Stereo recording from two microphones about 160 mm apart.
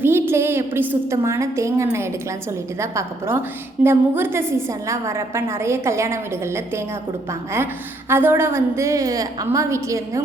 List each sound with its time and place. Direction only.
0.0 s a woman's voice: 15° right (ahead or behind)
8.1 s a woman's voice: 15° right (ahead or behind)